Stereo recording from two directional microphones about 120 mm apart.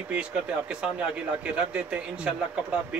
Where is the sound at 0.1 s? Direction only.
10° right (ahead or behind).